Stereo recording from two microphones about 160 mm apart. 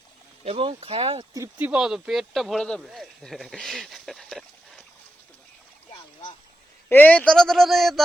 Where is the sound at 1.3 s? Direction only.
15° right (ahead or behind); by 4.8 s centre (ahead or behind).